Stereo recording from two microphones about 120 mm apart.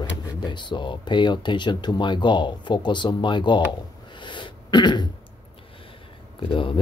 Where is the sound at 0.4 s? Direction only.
40° left (ahead or behind).